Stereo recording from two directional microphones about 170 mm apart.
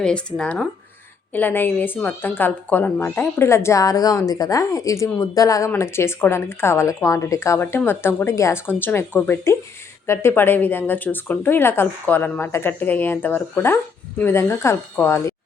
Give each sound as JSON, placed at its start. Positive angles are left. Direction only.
{"t": 0.3, "sound": "speech", "side_deg": 5}